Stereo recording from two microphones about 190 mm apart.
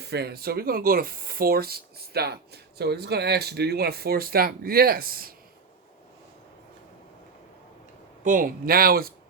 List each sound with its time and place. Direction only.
0.0 s speech: 60° right (ahead or behind)
8.2 s speech: 45° right (ahead or behind)